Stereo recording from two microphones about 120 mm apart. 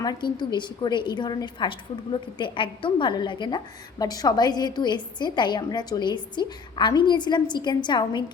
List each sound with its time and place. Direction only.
0.0 s a woman's voice: 35° left (ahead or behind)